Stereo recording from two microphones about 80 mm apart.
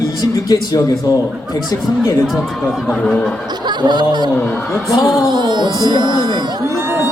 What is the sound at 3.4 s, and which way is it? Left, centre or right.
Speech, right.